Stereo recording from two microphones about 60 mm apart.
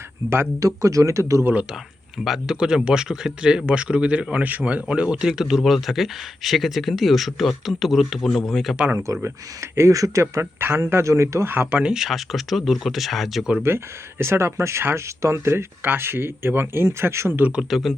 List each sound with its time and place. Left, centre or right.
0.6 s speech: right
2.1 s speech: centre
9.2 s speech: right
10.6 s speech: right
11.5 s speech: right
11.8 s speech: centre
12.0 s speech: centre
13.6 s speech: right
17.5 s speech: centre